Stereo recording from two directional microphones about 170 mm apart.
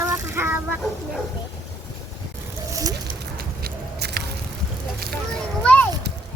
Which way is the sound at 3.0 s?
65° right (ahead or behind).